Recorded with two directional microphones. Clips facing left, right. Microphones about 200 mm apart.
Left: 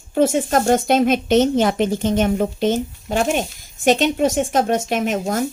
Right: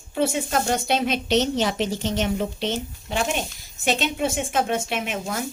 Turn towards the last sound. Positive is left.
turn(degrees=45)  # may be behind; listen again after turning